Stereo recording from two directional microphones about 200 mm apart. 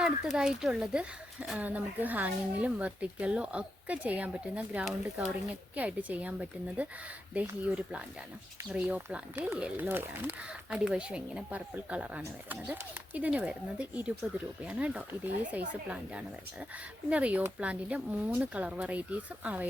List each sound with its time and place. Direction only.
0.3 s speech: 5° right (ahead or behind)